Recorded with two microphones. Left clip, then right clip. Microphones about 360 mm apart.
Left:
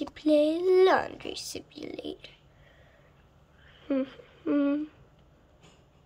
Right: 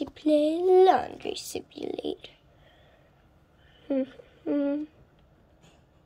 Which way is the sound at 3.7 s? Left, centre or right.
Centre.